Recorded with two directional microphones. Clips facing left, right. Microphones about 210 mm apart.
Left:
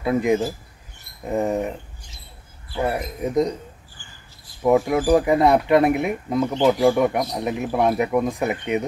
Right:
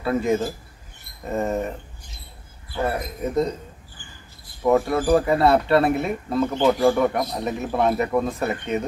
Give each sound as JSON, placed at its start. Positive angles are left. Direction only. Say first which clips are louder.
{"t": 0.0, "sound": "speech", "louder": "left 2 dB", "side_deg": 15}
{"t": 4.6, "sound": "speech", "louder": "left 1 dB", "side_deg": 15}